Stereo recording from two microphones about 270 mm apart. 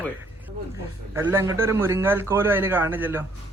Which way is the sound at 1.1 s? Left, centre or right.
Centre.